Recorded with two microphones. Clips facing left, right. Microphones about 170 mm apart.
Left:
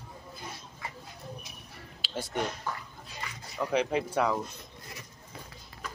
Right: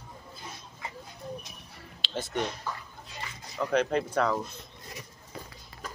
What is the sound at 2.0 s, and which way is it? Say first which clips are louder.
Speech: right 2 dB; 5° left (ahead or behind).